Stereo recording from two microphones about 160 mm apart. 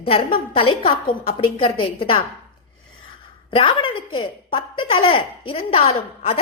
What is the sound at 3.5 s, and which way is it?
Speech, 30° left (ahead or behind).